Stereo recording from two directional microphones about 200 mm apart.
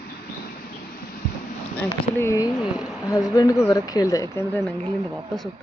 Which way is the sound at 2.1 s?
15° left (ahead or behind).